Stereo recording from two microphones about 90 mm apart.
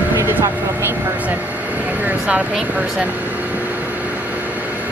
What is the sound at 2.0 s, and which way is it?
Vehicle, 20° right (ahead or behind).